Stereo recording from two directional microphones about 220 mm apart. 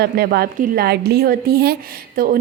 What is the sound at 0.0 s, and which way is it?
A woman's voice, 45° right (ahead or behind).